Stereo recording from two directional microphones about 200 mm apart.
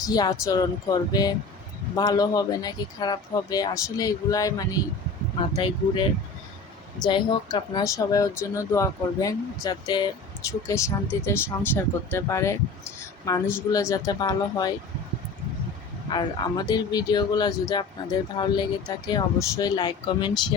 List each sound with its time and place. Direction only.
0.0 s speech: 20° left (ahead or behind)
16.0 s speech: 20° left (ahead or behind)